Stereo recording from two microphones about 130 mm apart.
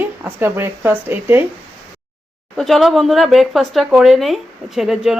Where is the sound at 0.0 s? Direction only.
15° right (ahead or behind).